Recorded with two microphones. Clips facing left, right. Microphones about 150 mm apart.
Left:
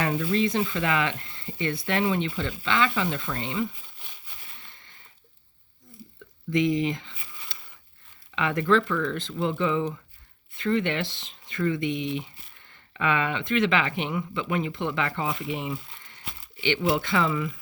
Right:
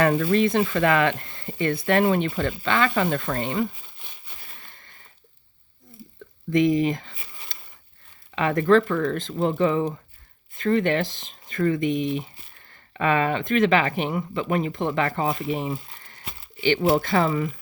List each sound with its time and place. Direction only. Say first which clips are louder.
0.0 s speech: right 5 dB; 60° right (ahead or behind)
4.6 s a sound: right 2 dB; 50° right (ahead or behind)
6.5 s speech: right 4 dB; 45° right (ahead or behind)